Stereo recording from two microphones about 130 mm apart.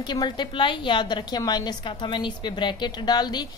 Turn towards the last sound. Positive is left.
turn(degrees=35)  # may be behind; listen again after turning